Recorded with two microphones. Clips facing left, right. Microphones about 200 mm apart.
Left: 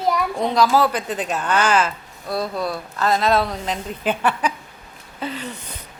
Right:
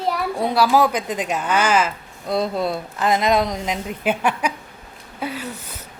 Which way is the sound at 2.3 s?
25° right (ahead or behind).